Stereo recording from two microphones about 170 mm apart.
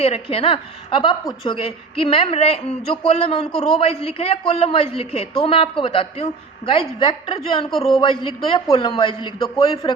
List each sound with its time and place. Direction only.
0.0 s a woman's voice: 35° left (ahead or behind)
7.7 s a man's voice: centre (ahead or behind)
7.9 s a woman's voice: 30° left (ahead or behind)